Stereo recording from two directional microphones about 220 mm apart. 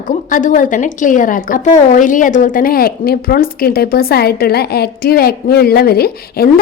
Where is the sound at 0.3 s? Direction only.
35° left (ahead or behind).